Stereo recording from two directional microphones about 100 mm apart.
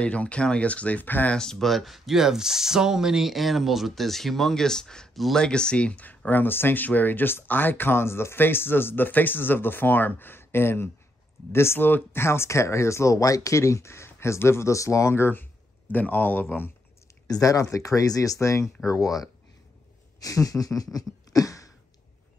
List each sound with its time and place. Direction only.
0.0 s speech: 15° left (ahead or behind)
17.3 s speech: 35° left (ahead or behind)
20.2 s a sound: 35° left (ahead or behind)